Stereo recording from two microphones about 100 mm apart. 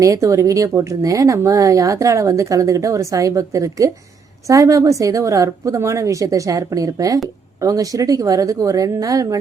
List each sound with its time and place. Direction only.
0.0 s speech: 35° right (ahead or behind)